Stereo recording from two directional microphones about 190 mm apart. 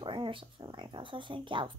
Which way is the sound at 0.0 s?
25° right (ahead or behind).